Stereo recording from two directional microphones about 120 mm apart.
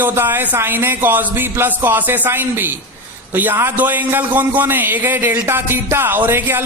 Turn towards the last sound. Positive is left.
turn(degrees=-20)  # may be behind; listen again after turning